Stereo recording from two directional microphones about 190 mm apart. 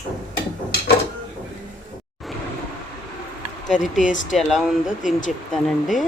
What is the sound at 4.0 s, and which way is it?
Speech, 40° left (ahead or behind).